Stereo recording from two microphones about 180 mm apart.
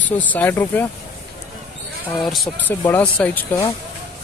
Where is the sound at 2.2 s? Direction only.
Centre (ahead or behind).